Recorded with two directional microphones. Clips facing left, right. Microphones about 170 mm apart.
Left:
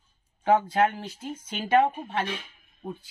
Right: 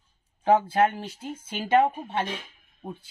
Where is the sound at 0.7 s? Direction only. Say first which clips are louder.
Right 1 dB; 25° right (ahead or behind).